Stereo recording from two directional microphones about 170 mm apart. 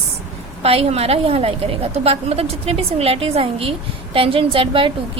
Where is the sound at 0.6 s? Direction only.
35° right (ahead or behind).